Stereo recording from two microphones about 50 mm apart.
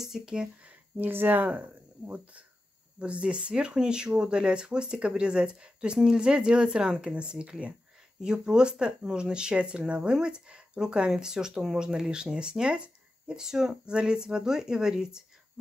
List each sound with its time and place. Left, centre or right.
0.0 s speech: centre
0.7 s speech: right; by 15.2 s centre